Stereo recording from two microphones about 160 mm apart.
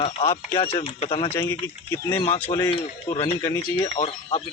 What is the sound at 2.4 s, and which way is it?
Speech, 15° left (ahead or behind).